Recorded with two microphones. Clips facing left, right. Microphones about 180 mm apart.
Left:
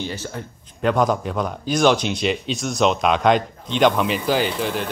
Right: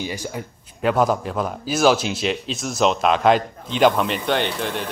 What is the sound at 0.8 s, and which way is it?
Speech, 5° right (ahead or behind).